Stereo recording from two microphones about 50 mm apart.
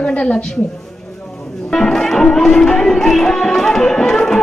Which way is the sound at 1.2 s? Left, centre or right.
Centre.